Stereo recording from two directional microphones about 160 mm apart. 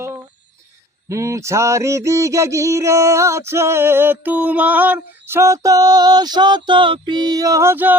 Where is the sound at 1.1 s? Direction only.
20° right (ahead or behind).